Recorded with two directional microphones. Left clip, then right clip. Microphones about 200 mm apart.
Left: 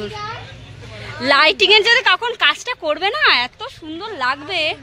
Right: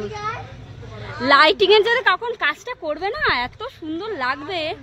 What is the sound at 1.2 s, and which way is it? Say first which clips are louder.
Speech: left 1 dB; 5° right (ahead or behind).